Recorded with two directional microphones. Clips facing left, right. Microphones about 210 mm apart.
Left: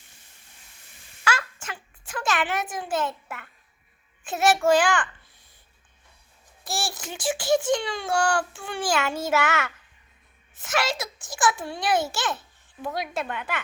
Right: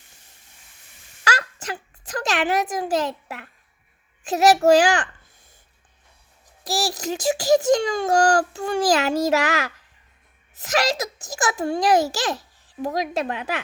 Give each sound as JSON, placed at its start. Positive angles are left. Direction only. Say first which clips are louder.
{"t": 1.2, "sound": "a woman's voice", "louder": "right 2 dB", "side_deg": -40}
{"t": 6.7, "sound": "a child's voice", "louder": "right 7 dB", "side_deg": -40}